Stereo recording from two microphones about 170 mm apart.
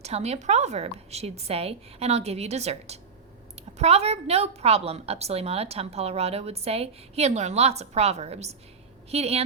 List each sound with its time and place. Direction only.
0.0 s a woman's voice: 40° right (ahead or behind)